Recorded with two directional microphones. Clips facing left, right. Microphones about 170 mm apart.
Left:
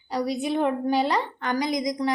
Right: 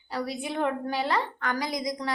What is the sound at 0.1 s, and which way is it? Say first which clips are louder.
A woman's voice: left 6 dB; 15° left (ahead or behind).